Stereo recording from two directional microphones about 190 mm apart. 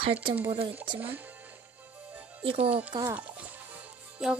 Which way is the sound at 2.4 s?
30° right (ahead or behind).